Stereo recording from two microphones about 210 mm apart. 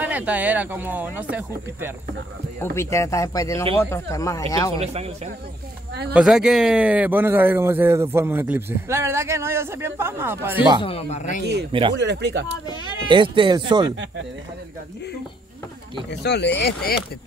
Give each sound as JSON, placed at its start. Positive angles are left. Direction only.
{"t": 0.0, "sound": "speech", "side_deg": -5}
{"t": 2.6, "sound": "speech", "side_deg": 10}
{"t": 4.7, "sound": "speech", "side_deg": -30}
{"t": 6.1, "sound": "speech", "side_deg": -5}
{"t": 10.8, "sound": "speech", "side_deg": 30}
{"t": 12.0, "sound": "speech", "side_deg": -55}
{"t": 13.1, "sound": "speech", "side_deg": -25}
{"t": 16.1, "sound": "speech", "side_deg": 55}